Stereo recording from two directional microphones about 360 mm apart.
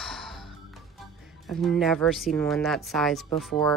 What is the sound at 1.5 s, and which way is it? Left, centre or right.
Speech, centre.